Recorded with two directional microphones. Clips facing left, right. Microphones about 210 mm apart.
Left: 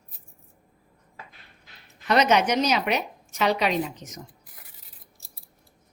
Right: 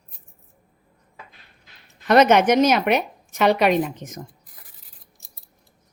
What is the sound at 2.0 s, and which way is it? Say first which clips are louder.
A woman's voice: right 6 dB; 50° right (ahead or behind).